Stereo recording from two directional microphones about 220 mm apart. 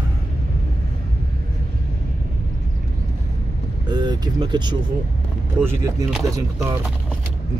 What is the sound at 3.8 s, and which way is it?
Speech, 20° right (ahead or behind).